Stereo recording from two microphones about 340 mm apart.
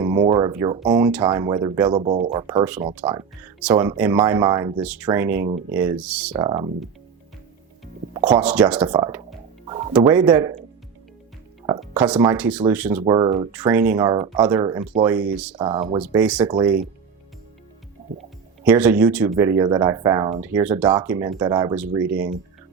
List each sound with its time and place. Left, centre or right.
0.0 s speech: centre
5.5 s speech: centre
5.7 s speech: centre
6.3 s speech: centre
8.1 s speech: centre
9.6 s music: centre
9.9 s speech: centre
11.8 s speech: centre
18.6 s speech: centre